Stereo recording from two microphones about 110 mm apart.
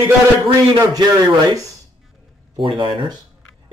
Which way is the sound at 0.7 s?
35° right (ahead or behind).